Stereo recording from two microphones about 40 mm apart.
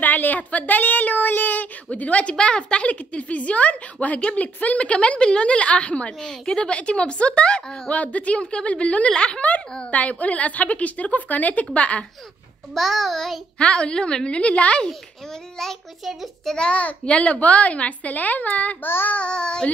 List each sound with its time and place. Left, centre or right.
0.0 s speech: left
1.9 s a child's voice: left
2.3 s a woman's voice: left
7.9 s a woman's voice: left
9.8 s a child's voice: left
12.7 s child singing: centre
13.6 s a woman's voice: left
15.5 s a child's voice: centre
16.0 s a child's voice: centre
16.7 s a child's voice: left
18.8 s child singing: left
19.1 s a woman's voice: left